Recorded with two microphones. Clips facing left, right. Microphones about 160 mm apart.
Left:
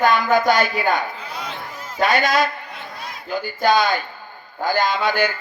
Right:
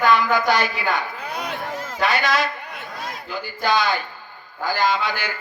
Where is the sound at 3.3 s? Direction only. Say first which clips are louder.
Left 5 dB; 40° left (ahead or behind).